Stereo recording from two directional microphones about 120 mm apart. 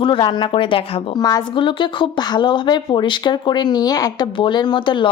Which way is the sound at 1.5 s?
45° left (ahead or behind).